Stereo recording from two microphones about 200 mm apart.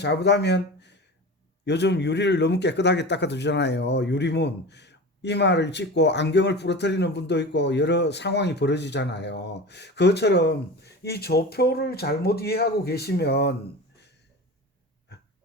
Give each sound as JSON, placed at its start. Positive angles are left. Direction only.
{"t": 0.0, "sound": "a man's voice", "side_deg": 55}